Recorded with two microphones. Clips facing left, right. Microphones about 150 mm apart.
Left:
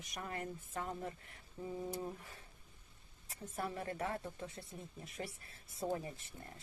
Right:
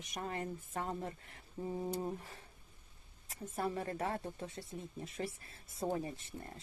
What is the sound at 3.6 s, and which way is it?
Speech, 35° right (ahead or behind).